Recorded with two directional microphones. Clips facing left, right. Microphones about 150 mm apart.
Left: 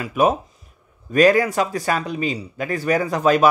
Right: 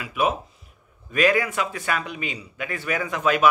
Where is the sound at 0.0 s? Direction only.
40° left (ahead or behind).